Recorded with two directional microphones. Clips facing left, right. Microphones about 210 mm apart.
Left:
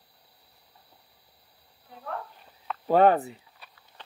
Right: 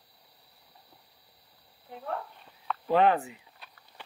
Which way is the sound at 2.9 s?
40° left (ahead or behind).